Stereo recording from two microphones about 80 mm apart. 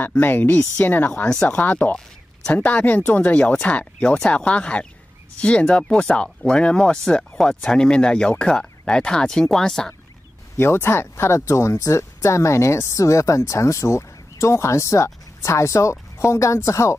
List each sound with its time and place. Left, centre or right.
0.2 s speech: left; by 9.9 s centre
10.6 s speech: left